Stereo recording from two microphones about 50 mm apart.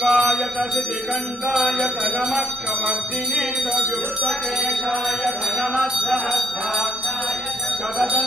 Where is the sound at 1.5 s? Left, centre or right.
Centre.